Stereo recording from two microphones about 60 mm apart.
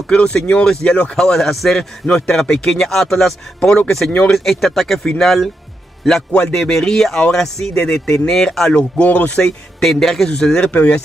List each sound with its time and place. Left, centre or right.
0.0 s a man's voice: centre
9.4 s a man's voice: centre; by 11.0 s left